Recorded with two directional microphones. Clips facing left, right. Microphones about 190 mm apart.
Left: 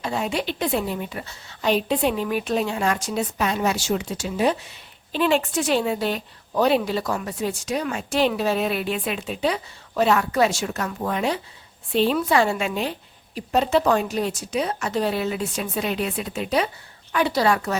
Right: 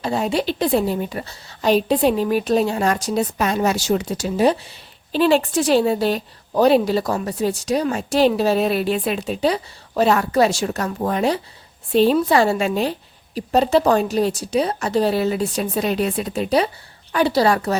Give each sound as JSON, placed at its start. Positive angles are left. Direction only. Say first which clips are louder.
{"t": 0.0, "sound": "a woman's voice", "louder": "right 5 dB", "side_deg": -35}